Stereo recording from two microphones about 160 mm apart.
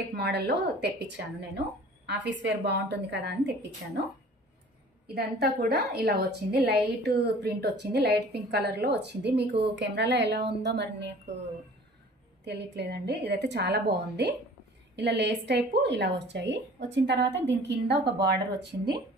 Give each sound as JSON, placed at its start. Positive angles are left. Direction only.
{"t": 0.1, "sound": "a woman's voice", "side_deg": -85}
{"t": 5.1, "sound": "a woman's voice", "side_deg": -75}
{"t": 12.4, "sound": "a woman's voice", "side_deg": -90}